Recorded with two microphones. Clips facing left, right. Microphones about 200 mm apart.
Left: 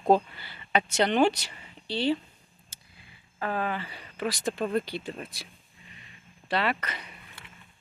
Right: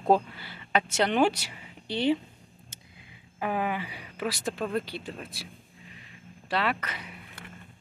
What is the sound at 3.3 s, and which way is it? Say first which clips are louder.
Speech: right 1 dB; 15° right (ahead or behind).